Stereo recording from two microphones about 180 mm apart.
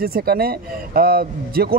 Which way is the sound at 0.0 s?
60° right (ahead or behind).